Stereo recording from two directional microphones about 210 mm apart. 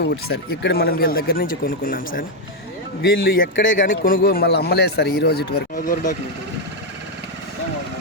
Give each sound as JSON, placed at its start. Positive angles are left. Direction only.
{"t": 0.3, "sound": "a man's voice", "side_deg": 50}